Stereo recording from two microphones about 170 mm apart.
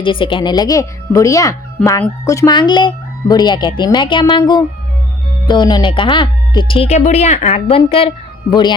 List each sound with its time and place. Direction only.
0.0 s speech: 30° left (ahead or behind)